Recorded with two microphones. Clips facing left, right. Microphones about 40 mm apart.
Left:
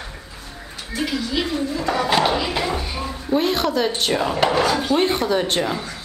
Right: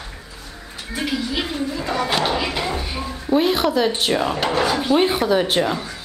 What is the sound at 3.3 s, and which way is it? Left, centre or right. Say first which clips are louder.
Speech: right 2 dB; centre.